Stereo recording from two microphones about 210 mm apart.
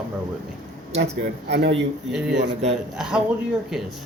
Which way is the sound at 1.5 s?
55° right (ahead or behind).